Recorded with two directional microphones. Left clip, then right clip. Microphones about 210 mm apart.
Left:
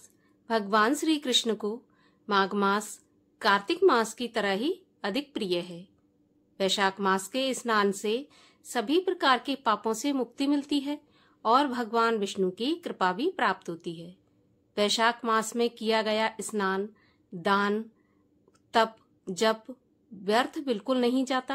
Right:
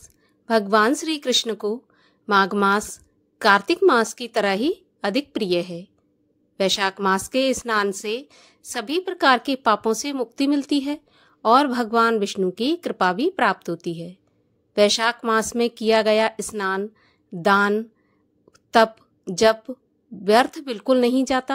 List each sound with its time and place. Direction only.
0.0 s a woman's voice: 30° right (ahead or behind)
18.5 s a sound: 30° right (ahead or behind)
20.2 s a woman's voice: 30° right (ahead or behind)